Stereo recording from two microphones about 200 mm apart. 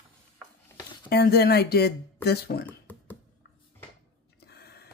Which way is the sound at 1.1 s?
50° left (ahead or behind).